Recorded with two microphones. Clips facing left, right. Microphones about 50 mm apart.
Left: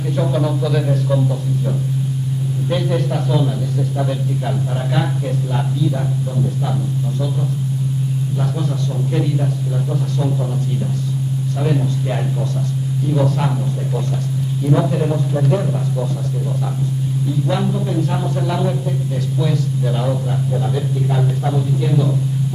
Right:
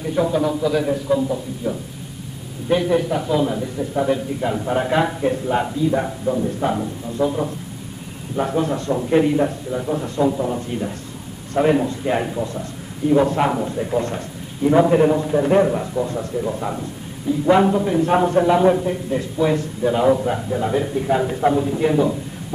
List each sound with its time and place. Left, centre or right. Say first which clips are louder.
0.1 s a man's voice: right 1 dB; centre
4.6 s a man's voice: right 2 dB; right
9.8 s a man's voice: right 5 dB; right
11.5 s a man's voice: right 5 dB; right
13.1 s a man's voice: right 3 dB; right
15.4 s a man's voice: right 5 dB; right
17.3 s a man's voice: right 7 dB; right